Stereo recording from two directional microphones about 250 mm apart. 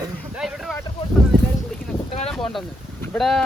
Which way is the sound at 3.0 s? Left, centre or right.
Centre.